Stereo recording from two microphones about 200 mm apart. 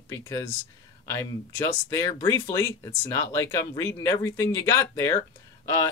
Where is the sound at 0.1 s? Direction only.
15° left (ahead or behind).